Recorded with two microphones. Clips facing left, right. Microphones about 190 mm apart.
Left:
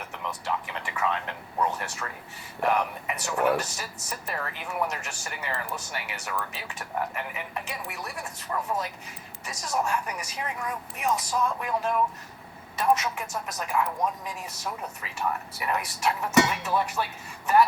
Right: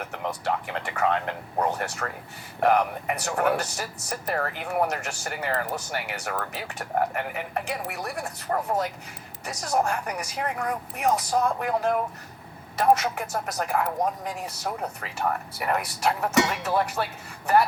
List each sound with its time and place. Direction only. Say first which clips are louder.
0.0 s speech: right 5 dB; 55° right (ahead or behind)